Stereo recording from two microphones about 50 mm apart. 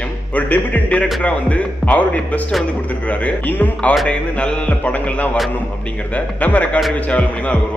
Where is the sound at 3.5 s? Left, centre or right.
Left.